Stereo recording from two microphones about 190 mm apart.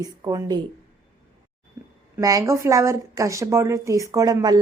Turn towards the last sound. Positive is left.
turn(degrees=-20)  # may be behind; listen again after turning